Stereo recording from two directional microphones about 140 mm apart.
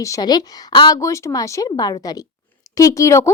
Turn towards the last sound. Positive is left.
turn(degrees=20)  # may be behind; listen again after turning